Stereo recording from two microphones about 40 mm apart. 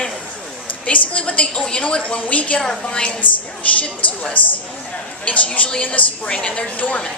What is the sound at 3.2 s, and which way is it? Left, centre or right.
Speech, left.